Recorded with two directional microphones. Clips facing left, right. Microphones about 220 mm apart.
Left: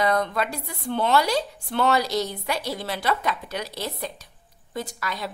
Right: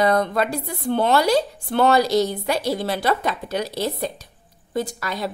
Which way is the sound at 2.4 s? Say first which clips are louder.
Right 6 dB; 30° right (ahead or behind).